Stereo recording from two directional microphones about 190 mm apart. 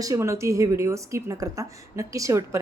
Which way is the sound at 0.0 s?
15° right (ahead or behind).